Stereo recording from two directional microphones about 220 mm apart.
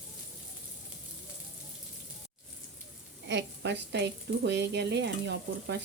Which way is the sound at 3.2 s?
55° right (ahead or behind).